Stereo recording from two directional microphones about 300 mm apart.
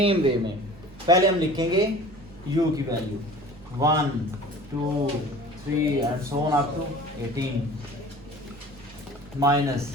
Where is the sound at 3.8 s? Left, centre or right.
Centre.